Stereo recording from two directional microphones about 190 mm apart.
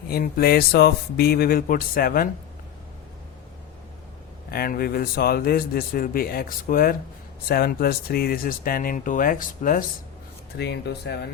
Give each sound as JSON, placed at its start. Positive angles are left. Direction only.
{"t": 0.1, "sound": "a man's voice", "side_deg": 55}
{"t": 4.5, "sound": "a man's voice", "side_deg": 50}
{"t": 10.6, "sound": "speech", "side_deg": 60}